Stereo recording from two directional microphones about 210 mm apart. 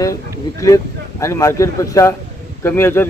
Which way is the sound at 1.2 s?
15° left (ahead or behind).